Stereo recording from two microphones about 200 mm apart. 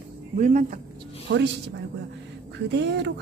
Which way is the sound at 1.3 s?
60° right (ahead or behind).